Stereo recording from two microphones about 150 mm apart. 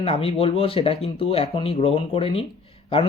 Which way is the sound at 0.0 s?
40° left (ahead or behind).